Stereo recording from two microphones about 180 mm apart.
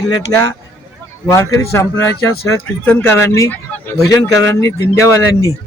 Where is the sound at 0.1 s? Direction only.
20° left (ahead or behind).